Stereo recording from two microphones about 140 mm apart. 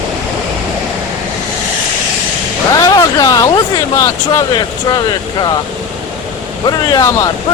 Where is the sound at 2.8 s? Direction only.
25° left (ahead or behind).